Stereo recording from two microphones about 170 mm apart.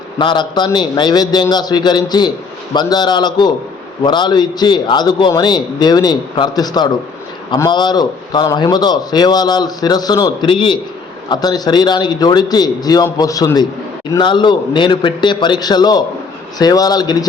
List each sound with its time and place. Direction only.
0.2 s a man's voice: 25° left (ahead or behind)